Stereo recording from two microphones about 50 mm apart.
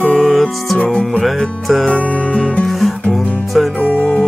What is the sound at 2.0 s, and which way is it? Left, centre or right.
Music, left.